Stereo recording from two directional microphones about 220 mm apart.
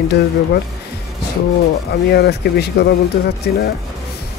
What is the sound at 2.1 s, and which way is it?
Speech, 50° left (ahead or behind).